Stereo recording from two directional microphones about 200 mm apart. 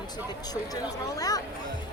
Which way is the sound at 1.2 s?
20° left (ahead or behind).